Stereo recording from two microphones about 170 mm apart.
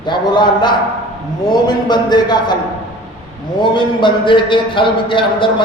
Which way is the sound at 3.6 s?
30° left (ahead or behind).